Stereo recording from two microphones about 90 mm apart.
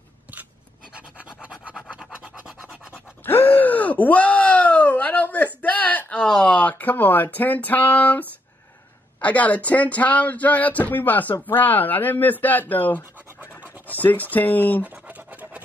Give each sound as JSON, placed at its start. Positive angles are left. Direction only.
{"t": 0.9, "sound": "scratch", "side_deg": -15}
{"t": 2.9, "sound": "groan", "side_deg": 20}
{"t": 9.2, "sound": "speech", "side_deg": 15}
{"t": 13.8, "sound": "scratch", "side_deg": 20}
{"t": 14.3, "sound": "speech", "side_deg": 20}
{"t": 14.9, "sound": "scratch", "side_deg": -20}